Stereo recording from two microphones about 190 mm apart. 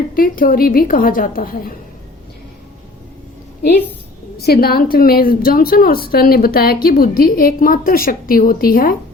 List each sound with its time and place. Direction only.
0.1 s a woman's voice: 50° left (ahead or behind)
4.4 s a woman's voice: 55° left (ahead or behind)